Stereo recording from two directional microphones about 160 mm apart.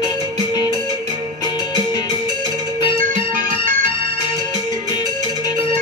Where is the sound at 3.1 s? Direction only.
50° right (ahead or behind).